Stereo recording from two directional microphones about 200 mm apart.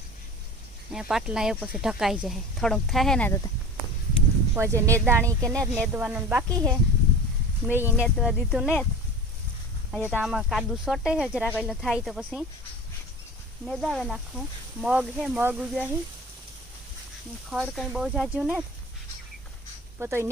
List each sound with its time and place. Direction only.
0.9 s speech: 5° right (ahead or behind)
4.5 s speech: 15° right (ahead or behind)
5.5 s speech: 5° left (ahead or behind)
5.9 s speech: 10° right (ahead or behind)
6.5 s speech: 20° right (ahead or behind); by 8.9 s centre (ahead or behind)
10.0 s speech: centre (ahead or behind)
13.7 s speech: centre (ahead or behind)
17.5 s speech: centre (ahead or behind)
20.0 s speech: 15° right (ahead or behind)